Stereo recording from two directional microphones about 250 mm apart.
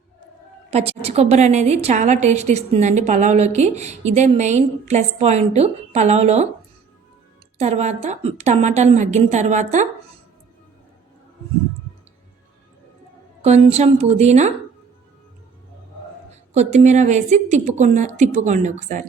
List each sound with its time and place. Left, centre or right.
0.7 s a woman's voice: right
7.6 s a woman's voice: right
13.4 s a woman's voice: right
16.6 s a woman's voice: right